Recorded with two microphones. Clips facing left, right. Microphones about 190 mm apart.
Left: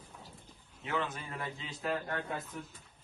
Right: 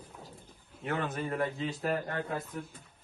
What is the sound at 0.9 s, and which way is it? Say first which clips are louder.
Speech: right 4 dB; 45° right (ahead or behind).